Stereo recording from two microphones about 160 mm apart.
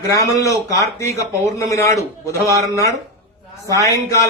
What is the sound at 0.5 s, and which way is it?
Speech, 20° left (ahead or behind).